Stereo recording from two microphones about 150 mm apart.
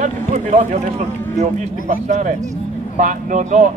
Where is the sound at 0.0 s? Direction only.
50° right (ahead or behind).